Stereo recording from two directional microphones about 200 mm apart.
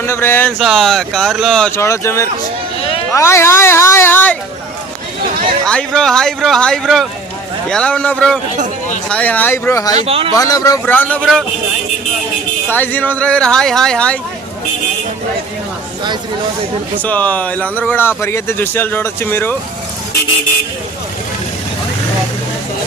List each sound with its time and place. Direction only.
0.0 s speech: 10° left (ahead or behind)
5.6 s speech: 5° left (ahead or behind)
10.0 s speech: 30° right (ahead or behind)
10.3 s speech: 15° left (ahead or behind)
12.6 s speech: 10° left (ahead or behind)
17.0 s speech: 10° left (ahead or behind)